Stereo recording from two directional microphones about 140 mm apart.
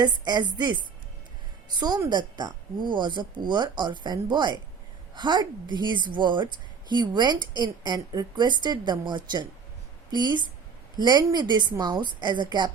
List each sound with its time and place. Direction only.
0.5 s speech: 30° right (ahead or behind)